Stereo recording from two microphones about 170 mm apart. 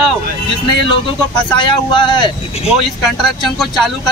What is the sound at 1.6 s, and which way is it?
Speech, 25° left (ahead or behind).